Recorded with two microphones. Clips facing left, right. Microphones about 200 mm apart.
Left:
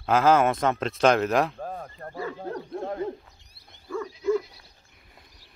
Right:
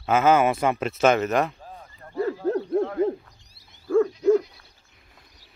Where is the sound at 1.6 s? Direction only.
50° left (ahead or behind).